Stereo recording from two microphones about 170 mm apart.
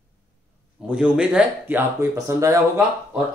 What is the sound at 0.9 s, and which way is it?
Speech, 5° right (ahead or behind).